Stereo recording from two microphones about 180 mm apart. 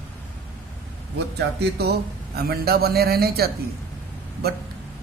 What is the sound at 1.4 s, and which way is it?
A man's voice, 65° right (ahead or behind).